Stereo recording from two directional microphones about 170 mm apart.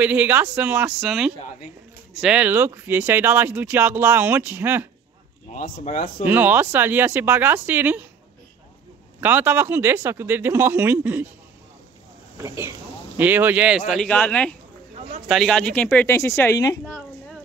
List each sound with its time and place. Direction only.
0.0 s speech: 10° right (ahead or behind)
5.5 s speech: 50° left (ahead or behind)
6.2 s speech: 10° right (ahead or behind)
9.2 s speech: 10° right (ahead or behind)
12.4 s a woman's voice: 15° right (ahead or behind); by 16.8 s 20° left (ahead or behind)
16.8 s a sound: 5° left (ahead or behind)